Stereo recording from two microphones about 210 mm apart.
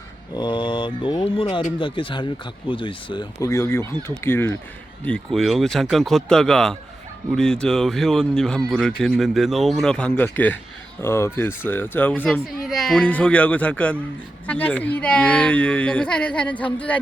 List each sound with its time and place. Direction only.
0.3 s mantra: 20° left (ahead or behind)
2.6 s speech: 25° left (ahead or behind); by 17.0 s 5° left (ahead or behind)